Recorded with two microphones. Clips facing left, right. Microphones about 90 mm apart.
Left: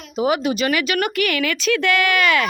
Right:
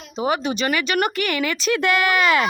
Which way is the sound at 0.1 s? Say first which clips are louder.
Left 3 dB; 5° left (ahead or behind).